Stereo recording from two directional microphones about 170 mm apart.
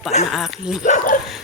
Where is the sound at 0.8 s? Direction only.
50° left (ahead or behind).